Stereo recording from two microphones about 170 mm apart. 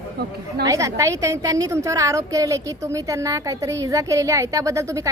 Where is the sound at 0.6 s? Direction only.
20° right (ahead or behind).